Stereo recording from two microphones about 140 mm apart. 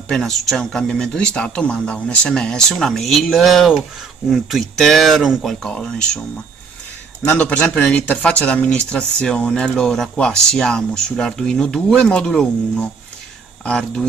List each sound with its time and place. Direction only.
0.1 s speech: centre (ahead or behind)
7.2 s speech: 10° left (ahead or behind)